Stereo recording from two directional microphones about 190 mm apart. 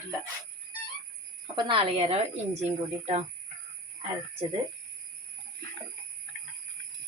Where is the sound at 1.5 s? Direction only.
30° right (ahead or behind).